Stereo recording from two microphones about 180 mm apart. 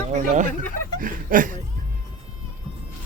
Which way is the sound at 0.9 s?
50° right (ahead or behind).